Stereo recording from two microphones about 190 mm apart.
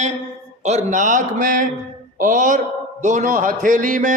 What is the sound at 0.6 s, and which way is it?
A man's voice, 40° right (ahead or behind).